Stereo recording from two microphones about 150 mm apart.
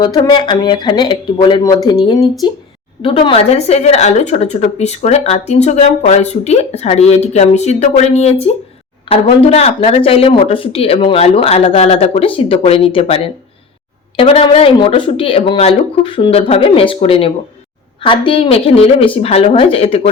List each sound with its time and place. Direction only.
0.0 s speech: 30° left (ahead or behind)